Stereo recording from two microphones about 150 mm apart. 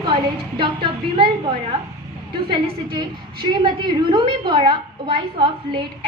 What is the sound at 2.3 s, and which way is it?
A woman's voice, 35° right (ahead or behind).